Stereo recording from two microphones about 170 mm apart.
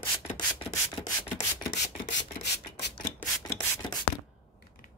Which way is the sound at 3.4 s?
25° left (ahead or behind).